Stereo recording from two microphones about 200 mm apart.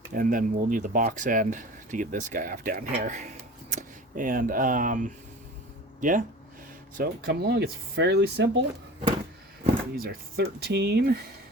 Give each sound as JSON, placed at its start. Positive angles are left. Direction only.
{"t": 0.1, "sound": "speech", "side_deg": -40}
{"t": 6.9, "sound": "speech", "side_deg": -50}
{"t": 9.9, "sound": "speech", "side_deg": -45}